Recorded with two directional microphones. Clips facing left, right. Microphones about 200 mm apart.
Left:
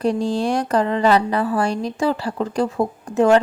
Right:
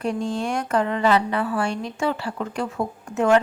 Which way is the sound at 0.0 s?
35° left (ahead or behind).